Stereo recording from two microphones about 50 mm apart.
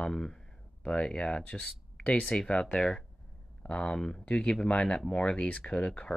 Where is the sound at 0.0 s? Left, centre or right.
Centre.